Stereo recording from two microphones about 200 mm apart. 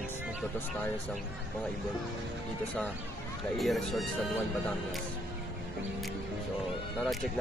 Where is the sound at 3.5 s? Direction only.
Centre (ahead or behind).